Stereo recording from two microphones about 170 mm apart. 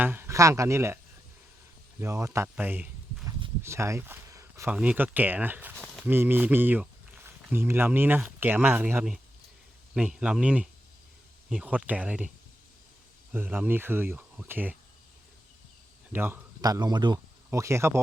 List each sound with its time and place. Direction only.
0.0 s speech: 10° right (ahead or behind)
2.0 s speech: 15° right (ahead or behind)
5.7 s a sound: centre (ahead or behind)
6.1 s speech: 10° right (ahead or behind)
13.3 s speech: 10° right (ahead or behind)
16.1 s speech: 10° right (ahead or behind)